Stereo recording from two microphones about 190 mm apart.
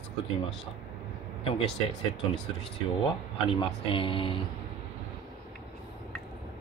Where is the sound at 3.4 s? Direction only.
25° left (ahead or behind).